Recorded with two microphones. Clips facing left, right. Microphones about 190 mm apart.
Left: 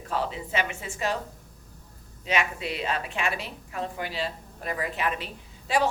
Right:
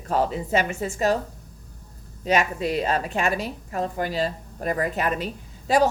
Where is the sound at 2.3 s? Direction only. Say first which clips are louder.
Right 6 dB; 40° right (ahead or behind).